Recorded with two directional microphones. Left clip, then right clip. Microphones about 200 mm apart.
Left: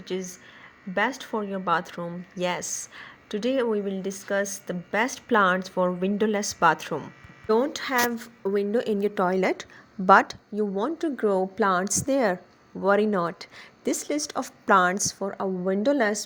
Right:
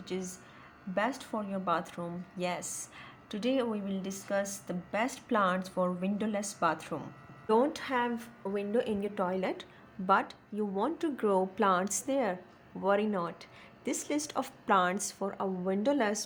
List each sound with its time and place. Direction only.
0.0 s speech: 20° left (ahead or behind)
10.5 s speech: 20° left (ahead or behind)